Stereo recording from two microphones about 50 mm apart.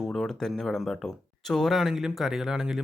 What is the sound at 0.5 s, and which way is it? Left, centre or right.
Speech, centre.